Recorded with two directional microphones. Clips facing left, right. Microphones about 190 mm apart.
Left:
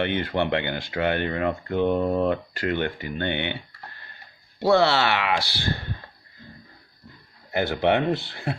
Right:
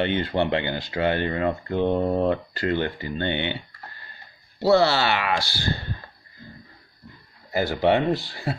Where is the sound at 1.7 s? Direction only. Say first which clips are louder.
Left 1 dB; 20° right (ahead or behind).